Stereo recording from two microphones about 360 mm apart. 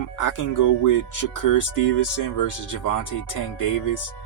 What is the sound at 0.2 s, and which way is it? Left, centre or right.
Speech, left.